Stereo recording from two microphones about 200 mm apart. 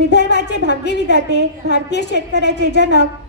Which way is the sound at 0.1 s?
60° left (ahead or behind).